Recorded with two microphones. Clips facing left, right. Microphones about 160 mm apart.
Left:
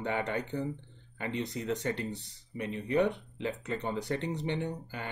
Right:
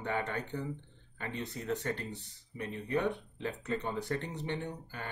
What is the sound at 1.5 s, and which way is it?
Speech, 15° left (ahead or behind).